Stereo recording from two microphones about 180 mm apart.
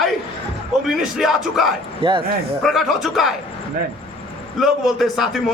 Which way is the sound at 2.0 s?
30° right (ahead or behind).